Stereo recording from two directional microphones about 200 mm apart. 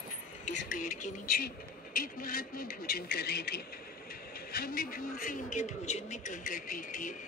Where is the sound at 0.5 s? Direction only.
40° left (ahead or behind).